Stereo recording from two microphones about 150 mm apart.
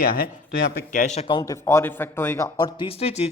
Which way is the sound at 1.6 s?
15° left (ahead or behind).